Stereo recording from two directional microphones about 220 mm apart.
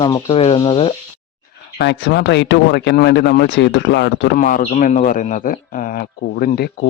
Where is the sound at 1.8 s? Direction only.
50° left (ahead or behind).